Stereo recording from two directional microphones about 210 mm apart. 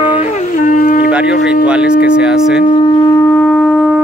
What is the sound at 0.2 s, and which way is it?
Wind instrument, 35° left (ahead or behind).